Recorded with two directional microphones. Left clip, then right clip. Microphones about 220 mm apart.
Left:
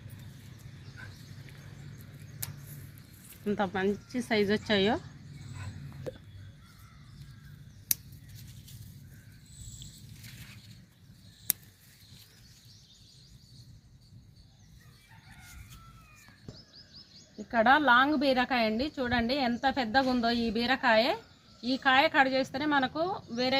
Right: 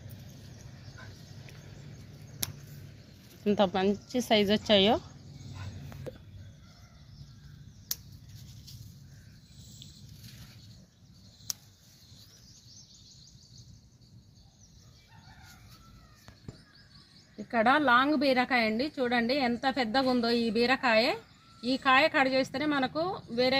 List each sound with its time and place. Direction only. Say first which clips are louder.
3.4 s a woman's voice: right 4 dB; 40° right (ahead or behind)
6.1 s a sound: left 3 dB; centre (ahead or behind)
17.3 s a woman's voice: left 1 dB; 40° right (ahead or behind)